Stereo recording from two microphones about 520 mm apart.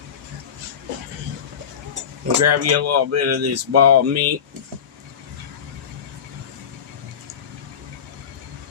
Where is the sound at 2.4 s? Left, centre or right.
Right.